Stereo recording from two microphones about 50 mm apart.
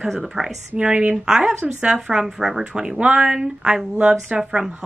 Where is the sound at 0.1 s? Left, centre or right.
Centre.